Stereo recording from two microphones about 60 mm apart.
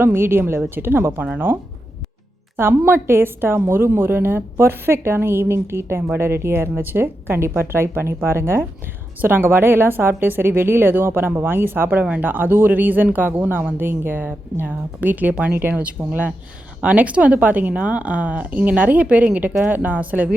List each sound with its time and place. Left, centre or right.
0.0 s a woman's voice: right
1.2 s a woman's voice: right
2.6 s a woman's voice: right